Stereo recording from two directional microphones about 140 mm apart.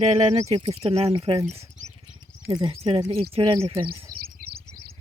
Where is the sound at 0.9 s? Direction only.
45° right (ahead or behind).